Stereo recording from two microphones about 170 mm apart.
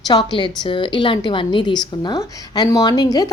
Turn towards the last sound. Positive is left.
turn(degrees=20)  # may be behind; listen again after turning